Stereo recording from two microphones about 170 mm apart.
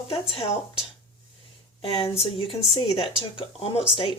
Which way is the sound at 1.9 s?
35° left (ahead or behind).